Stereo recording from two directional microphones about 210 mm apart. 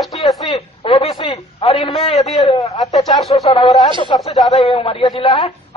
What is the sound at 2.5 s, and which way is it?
A woman's voice, 15° left (ahead or behind).